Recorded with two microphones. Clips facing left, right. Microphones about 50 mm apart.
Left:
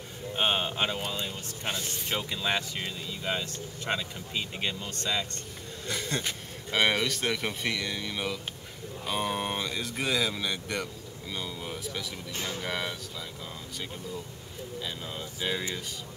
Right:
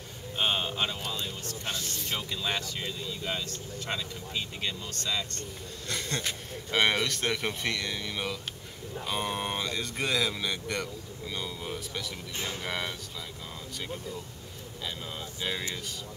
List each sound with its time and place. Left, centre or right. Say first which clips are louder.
0.4 s a man's voice: left 1 dB; centre
5.9 s speech: left 1 dB; centre
14.8 s speech: right 1 dB; centre